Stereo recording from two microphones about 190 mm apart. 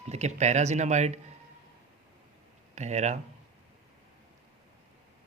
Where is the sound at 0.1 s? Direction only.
35° right (ahead or behind).